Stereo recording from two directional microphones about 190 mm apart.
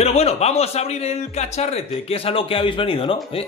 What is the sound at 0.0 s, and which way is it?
Speech, 35° left (ahead or behind).